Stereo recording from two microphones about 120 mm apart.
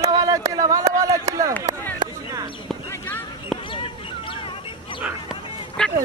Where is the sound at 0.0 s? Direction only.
30° right (ahead or behind).